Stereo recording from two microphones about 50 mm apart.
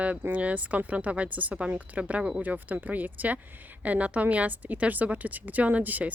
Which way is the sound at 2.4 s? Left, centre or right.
Right.